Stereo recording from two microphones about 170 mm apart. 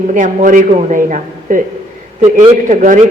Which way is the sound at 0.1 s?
50° right (ahead or behind).